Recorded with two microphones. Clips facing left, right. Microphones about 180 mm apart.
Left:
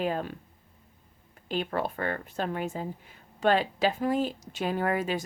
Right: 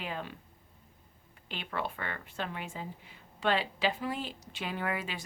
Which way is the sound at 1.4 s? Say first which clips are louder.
Left 7 dB; 40° left (ahead or behind).